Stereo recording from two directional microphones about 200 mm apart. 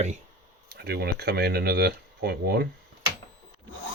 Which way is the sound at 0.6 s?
50° right (ahead or behind).